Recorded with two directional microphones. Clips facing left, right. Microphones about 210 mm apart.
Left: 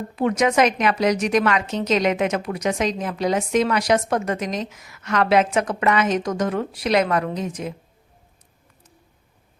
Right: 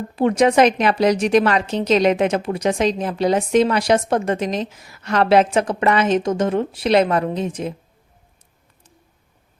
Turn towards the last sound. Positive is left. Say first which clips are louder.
# right 3 dB
turn(degrees=-30)  # may be behind; listen again after turning